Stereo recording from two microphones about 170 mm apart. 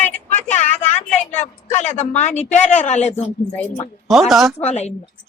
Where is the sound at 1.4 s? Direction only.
45° left (ahead or behind).